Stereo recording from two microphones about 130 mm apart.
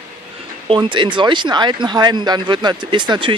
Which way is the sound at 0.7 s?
40° right (ahead or behind).